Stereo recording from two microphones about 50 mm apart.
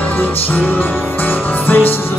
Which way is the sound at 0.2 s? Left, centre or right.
Left.